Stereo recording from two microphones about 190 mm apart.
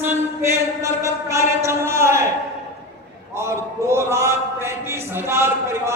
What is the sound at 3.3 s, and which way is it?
Speech, 15° right (ahead or behind).